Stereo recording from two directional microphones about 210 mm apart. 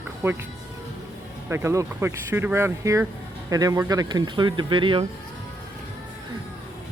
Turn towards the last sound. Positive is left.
turn(degrees=-25)  # may be behind; listen again after turning